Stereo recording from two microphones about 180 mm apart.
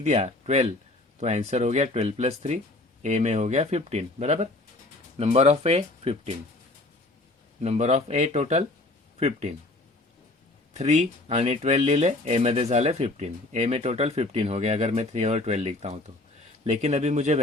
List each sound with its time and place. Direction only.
0.0 s speech: 35° right (ahead or behind)
7.6 s speech: 40° right (ahead or behind)
10.8 s speech: 40° right (ahead or behind)